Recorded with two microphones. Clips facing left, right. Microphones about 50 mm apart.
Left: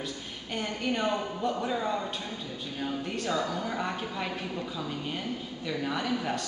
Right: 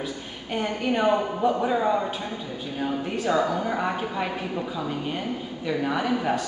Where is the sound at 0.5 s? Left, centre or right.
Centre.